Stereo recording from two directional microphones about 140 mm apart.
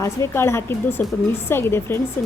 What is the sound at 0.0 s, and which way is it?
A woman's voice, 20° left (ahead or behind).